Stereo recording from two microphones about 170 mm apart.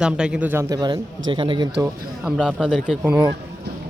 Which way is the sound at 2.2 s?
5° right (ahead or behind).